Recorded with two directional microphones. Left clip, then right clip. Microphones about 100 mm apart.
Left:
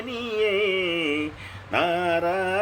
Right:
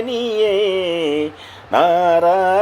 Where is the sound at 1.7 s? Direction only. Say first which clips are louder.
Right 10 dB; 40° right (ahead or behind).